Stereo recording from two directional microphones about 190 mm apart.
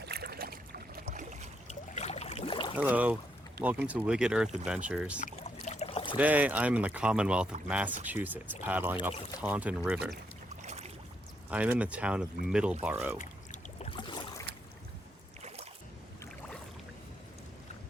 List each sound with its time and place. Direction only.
0.0 s boat: 55° right (ahead or behind)
1.0 s boat: 40° right (ahead or behind)
2.0 s a sound: 35° left (ahead or behind)
2.7 s speech: 10° right (ahead or behind)
5.2 s a sound: 35° left (ahead or behind)
6.1 s speech: 10° right (ahead or behind)
10.6 s boat: 35° right (ahead or behind)
11.5 s speech: 5° right (ahead or behind)
13.1 s pour: 40° left (ahead or behind)
13.9 s boat: 25° left (ahead or behind)
15.4 s boat: 35° right (ahead or behind)